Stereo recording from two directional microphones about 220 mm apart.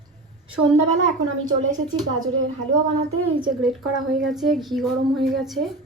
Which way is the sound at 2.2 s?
65° right (ahead or behind).